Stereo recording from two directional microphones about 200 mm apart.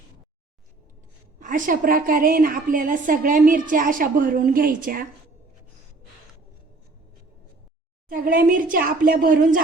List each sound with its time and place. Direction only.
1.4 s a woman's voice: 40° right (ahead or behind)
8.1 s a woman's voice: 45° right (ahead or behind)